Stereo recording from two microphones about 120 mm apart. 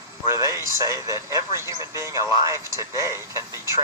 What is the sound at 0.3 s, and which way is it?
A man's voice, 25° right (ahead or behind).